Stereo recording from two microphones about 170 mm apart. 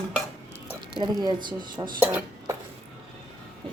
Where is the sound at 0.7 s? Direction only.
25° right (ahead or behind).